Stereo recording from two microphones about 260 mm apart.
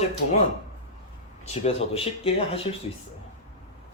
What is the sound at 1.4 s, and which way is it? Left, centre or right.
Speech, left.